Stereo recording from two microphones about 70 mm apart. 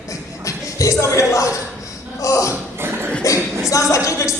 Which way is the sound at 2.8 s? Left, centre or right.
Right.